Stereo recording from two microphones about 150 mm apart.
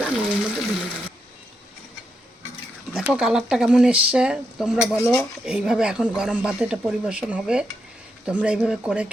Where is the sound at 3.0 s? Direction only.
5° right (ahead or behind).